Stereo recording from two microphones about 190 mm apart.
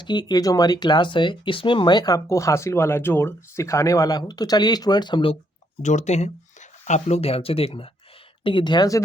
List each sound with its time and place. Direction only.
0.0 s speech: 25° left (ahead or behind)
5.8 s speech: 40° left (ahead or behind); by 9.0 s 20° left (ahead or behind)